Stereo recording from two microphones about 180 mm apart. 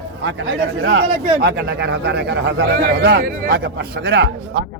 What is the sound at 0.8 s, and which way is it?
Speech, 65° right (ahead or behind).